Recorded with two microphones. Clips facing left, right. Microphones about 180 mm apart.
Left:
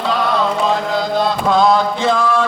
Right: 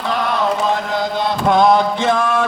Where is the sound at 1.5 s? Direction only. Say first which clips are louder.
Right 2 dB; 20° right (ahead or behind).